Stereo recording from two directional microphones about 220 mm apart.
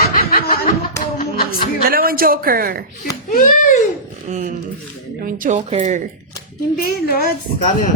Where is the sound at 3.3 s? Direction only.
35° left (ahead or behind).